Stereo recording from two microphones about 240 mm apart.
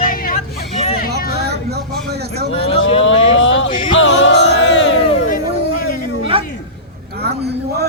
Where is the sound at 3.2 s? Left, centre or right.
Left.